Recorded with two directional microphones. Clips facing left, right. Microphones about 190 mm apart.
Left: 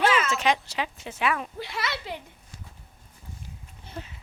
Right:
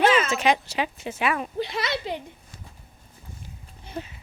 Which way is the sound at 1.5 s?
20° right (ahead or behind).